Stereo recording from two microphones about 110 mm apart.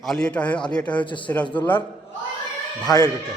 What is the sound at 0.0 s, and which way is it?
A man's voice, 5° left (ahead or behind).